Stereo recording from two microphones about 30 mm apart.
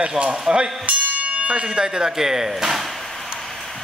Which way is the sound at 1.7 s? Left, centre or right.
Right.